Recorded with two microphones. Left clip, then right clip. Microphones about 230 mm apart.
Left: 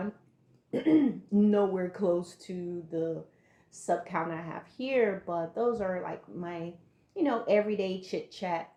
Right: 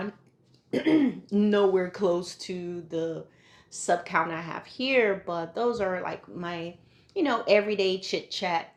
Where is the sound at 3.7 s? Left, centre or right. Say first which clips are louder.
Right 5 dB; right.